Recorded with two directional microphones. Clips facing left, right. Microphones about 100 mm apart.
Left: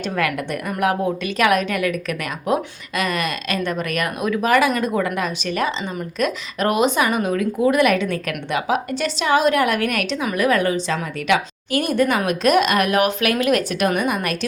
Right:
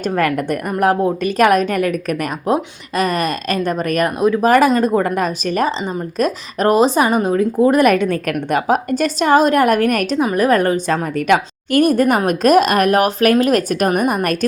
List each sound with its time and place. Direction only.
0.2 s a woman's voice: 45° right (ahead or behind)